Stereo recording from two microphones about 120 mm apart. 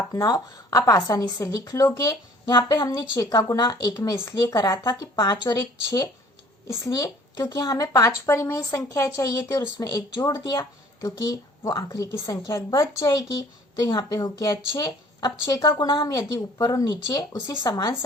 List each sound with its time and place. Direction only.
0.1 s a woman's voice: 30° left (ahead or behind)